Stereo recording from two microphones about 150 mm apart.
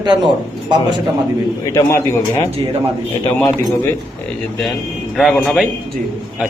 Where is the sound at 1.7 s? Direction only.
20° left (ahead or behind).